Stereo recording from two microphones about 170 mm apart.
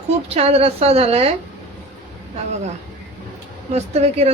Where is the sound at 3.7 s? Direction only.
40° right (ahead or behind).